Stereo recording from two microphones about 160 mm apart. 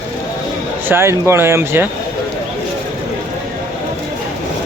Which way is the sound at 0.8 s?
15° right (ahead or behind).